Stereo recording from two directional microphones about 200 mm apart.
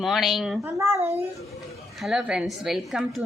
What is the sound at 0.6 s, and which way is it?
A child's voice, 15° right (ahead or behind).